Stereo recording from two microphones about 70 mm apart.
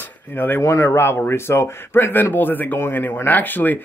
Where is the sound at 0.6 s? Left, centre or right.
Left.